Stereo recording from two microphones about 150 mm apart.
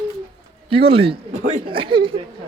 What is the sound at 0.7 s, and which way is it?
Speech, 40° right (ahead or behind).